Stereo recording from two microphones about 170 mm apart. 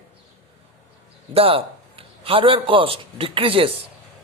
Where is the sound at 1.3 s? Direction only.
35° right (ahead or behind).